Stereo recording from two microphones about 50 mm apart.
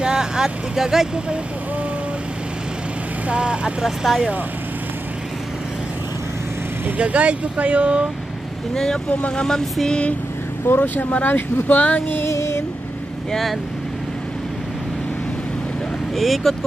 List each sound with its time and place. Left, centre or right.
0.0 s speech: centre
3.3 s speech: centre
4.0 s speech: centre
7.0 s speech: right
8.7 s vehicle: centre
10.7 s speech: left
12.3 s a sound: left
13.3 s speech: centre
16.2 s speech: centre